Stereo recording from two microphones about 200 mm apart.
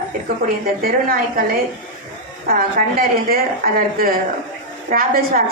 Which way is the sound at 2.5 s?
45° right (ahead or behind).